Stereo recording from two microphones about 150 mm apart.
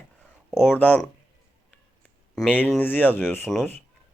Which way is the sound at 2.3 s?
5° left (ahead or behind).